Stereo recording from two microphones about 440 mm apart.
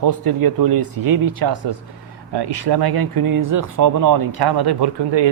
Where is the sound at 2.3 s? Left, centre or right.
Right.